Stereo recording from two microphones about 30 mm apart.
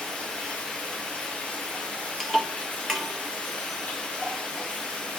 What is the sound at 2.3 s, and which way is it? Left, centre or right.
Tick-tock, centre.